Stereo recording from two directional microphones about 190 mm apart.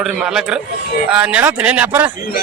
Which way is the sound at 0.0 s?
5° right (ahead or behind).